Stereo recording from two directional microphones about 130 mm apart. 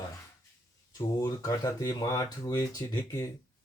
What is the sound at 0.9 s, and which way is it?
Speech, 25° left (ahead or behind).